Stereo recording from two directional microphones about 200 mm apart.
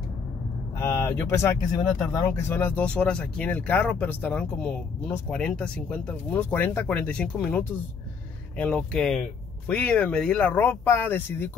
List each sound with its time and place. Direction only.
0.7 s speech: 10° left (ahead or behind)